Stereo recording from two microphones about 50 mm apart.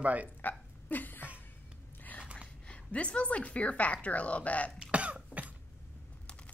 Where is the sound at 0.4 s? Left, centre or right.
Left.